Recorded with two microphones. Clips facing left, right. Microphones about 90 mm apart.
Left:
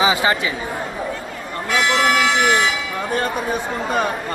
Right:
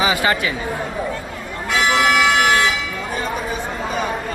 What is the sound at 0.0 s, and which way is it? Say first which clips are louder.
Speech: left 1 dB; 25° left (ahead or behind).